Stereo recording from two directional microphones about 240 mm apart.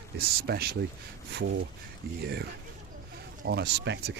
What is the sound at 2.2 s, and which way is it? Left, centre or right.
Speech, right.